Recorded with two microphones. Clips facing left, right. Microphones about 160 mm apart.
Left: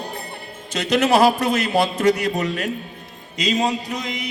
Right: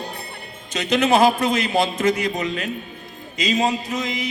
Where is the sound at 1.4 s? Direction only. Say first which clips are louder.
Left 1 dB; 60° left (ahead or behind).